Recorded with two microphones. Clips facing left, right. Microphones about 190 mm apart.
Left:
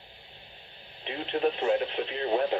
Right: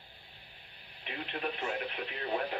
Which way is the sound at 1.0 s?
25° left (ahead or behind).